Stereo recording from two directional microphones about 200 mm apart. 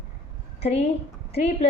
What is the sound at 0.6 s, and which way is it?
A woman's voice, 30° left (ahead or behind).